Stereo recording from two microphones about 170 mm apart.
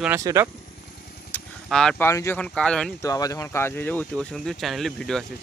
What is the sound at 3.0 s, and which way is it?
Speech, 20° left (ahead or behind).